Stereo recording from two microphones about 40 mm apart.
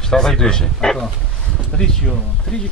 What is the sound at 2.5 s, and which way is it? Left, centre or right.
Speech, centre.